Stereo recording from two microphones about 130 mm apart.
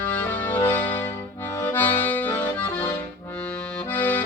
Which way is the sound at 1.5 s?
15° left (ahead or behind).